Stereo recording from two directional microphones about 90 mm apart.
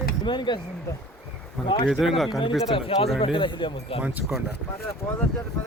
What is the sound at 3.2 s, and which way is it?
Speech, 70° left (ahead or behind).